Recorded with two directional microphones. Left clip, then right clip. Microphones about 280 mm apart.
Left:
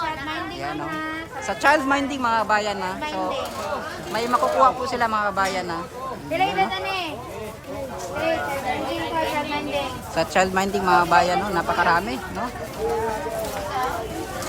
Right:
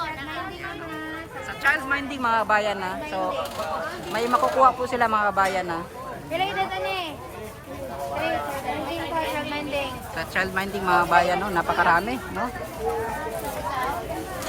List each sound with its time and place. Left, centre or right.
1.6 s a woman's voice: centre
9.5 s a woman's voice: centre